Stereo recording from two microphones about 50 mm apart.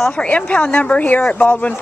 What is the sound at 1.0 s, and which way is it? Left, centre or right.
Speech, left.